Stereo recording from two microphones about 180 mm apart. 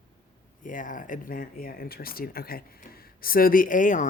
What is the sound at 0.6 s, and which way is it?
Speech, 45° left (ahead or behind).